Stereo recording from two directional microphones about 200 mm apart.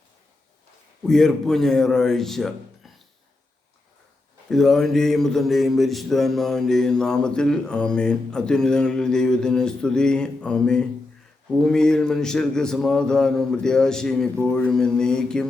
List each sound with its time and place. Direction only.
1.0 s a man's voice: centre (ahead or behind)
4.4 s a man's voice: centre (ahead or behind)